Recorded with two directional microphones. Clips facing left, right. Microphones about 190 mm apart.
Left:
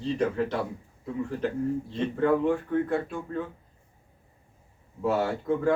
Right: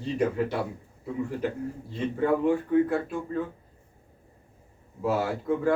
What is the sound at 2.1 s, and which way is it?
Speech, 5° right (ahead or behind).